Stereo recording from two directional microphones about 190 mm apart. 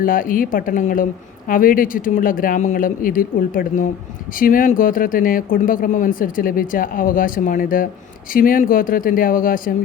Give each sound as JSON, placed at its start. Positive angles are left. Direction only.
{"t": 0.0, "sound": "speech", "side_deg": 45}